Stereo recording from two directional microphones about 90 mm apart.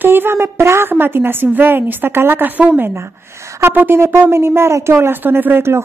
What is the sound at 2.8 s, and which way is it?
A woman's voice, 30° right (ahead or behind).